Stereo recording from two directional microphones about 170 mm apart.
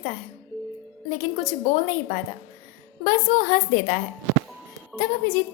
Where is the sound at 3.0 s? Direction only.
50° left (ahead or behind).